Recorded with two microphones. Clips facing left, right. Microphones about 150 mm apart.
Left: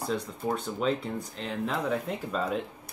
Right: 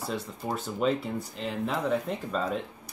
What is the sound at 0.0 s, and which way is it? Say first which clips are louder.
Speech: left 3 dB; centre (ahead or behind).